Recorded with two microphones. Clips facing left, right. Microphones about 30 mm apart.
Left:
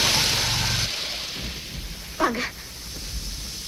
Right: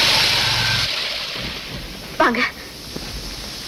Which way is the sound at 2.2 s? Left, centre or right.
Right.